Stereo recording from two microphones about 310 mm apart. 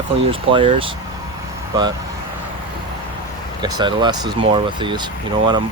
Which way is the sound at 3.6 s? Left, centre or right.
Centre.